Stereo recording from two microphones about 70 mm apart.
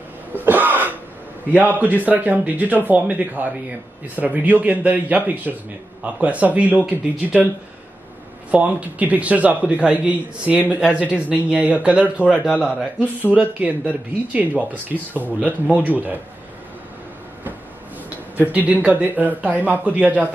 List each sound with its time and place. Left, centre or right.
0.4 s throat clearing: right
1.5 s speech: right
8.5 s speech: centre
13.3 s speech: centre
18.4 s speech: right